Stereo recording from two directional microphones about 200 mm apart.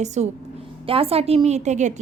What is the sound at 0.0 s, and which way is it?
A woman's voice, 35° right (ahead or behind).